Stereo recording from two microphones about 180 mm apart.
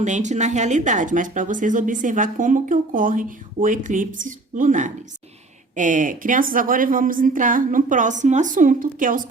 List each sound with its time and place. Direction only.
0.0 s speech: 40° right (ahead or behind)